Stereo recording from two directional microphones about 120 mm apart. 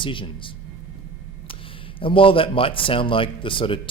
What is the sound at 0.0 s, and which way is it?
Speech, 45° left (ahead or behind).